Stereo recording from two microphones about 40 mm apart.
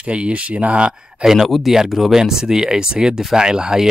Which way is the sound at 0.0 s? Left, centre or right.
Right.